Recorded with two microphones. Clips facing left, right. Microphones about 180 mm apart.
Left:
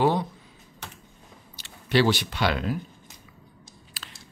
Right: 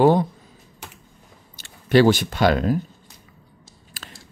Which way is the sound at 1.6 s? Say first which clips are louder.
Right 7 dB; 50° right (ahead or behind).